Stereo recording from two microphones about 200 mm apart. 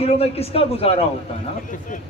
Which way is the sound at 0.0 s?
30° left (ahead or behind).